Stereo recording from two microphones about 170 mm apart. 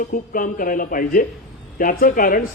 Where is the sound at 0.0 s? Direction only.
50° left (ahead or behind).